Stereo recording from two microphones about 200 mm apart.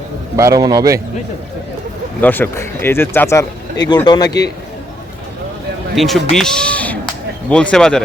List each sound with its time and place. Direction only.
0.3 s a man's voice: 15° right (ahead or behind)
2.2 s speech: 10° left (ahead or behind)
4.3 s a man's voice: 55° left (ahead or behind)
6.0 s speech: centre (ahead or behind)